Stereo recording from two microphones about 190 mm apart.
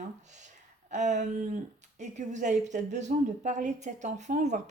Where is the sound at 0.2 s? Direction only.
40° right (ahead or behind).